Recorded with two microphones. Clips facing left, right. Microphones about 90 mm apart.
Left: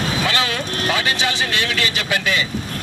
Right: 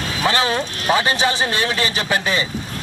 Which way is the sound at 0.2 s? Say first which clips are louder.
Right 3 dB; 30° right (ahead or behind).